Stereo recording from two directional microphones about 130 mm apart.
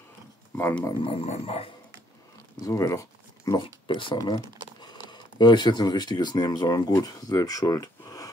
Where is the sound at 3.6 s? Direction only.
40° left (ahead or behind).